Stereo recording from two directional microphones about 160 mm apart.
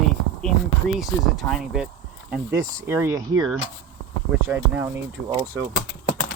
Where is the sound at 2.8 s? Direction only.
15° right (ahead or behind).